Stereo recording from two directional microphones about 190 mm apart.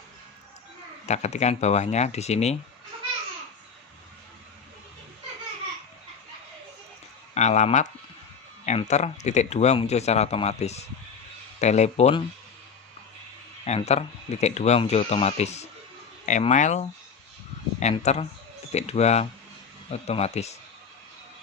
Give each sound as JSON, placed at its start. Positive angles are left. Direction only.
{"t": 1.0, "sound": "a man's voice", "side_deg": 35}
{"t": 7.3, "sound": "a man's voice", "side_deg": 35}
{"t": 13.7, "sound": "a man's voice", "side_deg": 35}